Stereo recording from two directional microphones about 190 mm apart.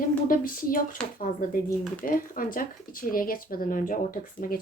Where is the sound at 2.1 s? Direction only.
45° left (ahead or behind).